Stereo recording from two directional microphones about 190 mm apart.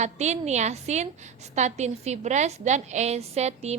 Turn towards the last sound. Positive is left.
turn(degrees=-35)  # may be behind; listen again after turning